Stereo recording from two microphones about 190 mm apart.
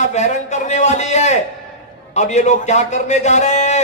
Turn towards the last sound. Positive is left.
turn(degrees=35)  # may be behind; listen again after turning